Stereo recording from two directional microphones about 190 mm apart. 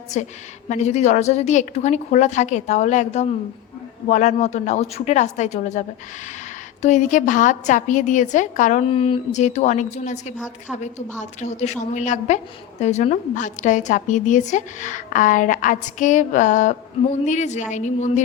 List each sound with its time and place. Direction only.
0.1 s a woman's voice: 40° left (ahead or behind)
8.9 s a woman's voice: 30° left (ahead or behind)
10.3 s a woman's voice: 5° right (ahead or behind)
11.2 s a woman's voice: 40° left (ahead or behind)